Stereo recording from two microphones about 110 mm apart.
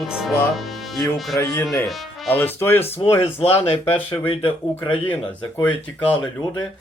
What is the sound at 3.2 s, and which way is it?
Speech, 70° left (ahead or behind).